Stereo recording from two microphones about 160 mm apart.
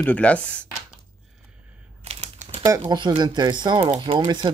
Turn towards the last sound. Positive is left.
turn(degrees=-30)  # may be behind; listen again after turning